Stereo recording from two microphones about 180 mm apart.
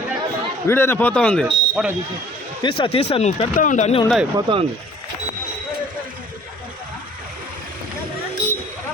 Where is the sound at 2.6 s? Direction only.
30° left (ahead or behind).